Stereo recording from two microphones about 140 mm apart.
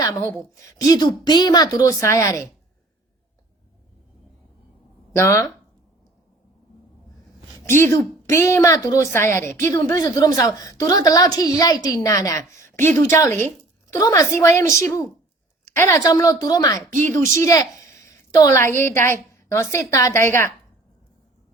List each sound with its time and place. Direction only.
0.0 s a woman's voice: 20° left (ahead or behind)
5.1 s a woman's voice: 20° left (ahead or behind)
7.6 s a woman's voice: 20° left (ahead or behind)